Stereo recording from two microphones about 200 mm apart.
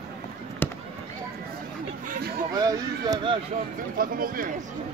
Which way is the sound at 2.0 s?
45° right (ahead or behind).